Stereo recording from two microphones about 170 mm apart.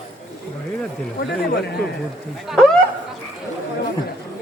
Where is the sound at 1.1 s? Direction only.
70° left (ahead or behind).